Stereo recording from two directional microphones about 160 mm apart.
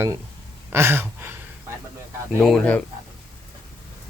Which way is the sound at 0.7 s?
15° right (ahead or behind).